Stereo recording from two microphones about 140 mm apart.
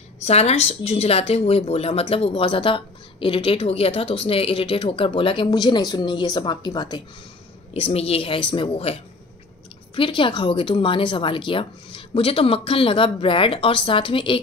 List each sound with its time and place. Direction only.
0.2 s a woman's voice: 50° left (ahead or behind); by 7.0 s 30° left (ahead or behind)
7.7 s a woman's voice: 45° left (ahead or behind)
9.9 s a woman's voice: 35° left (ahead or behind)